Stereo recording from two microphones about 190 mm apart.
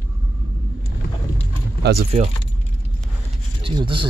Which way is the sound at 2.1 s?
30° right (ahead or behind).